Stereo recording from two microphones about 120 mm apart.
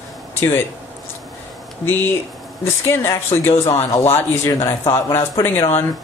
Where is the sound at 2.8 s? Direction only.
20° left (ahead or behind).